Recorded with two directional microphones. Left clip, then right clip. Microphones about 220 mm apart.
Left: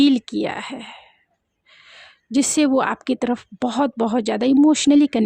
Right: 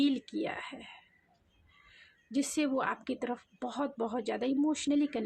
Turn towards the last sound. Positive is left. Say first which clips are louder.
# left 15 dB
turn(degrees=50)  # may be behind; listen again after turning